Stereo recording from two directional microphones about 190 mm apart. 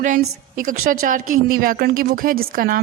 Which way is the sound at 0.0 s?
45° right (ahead or behind).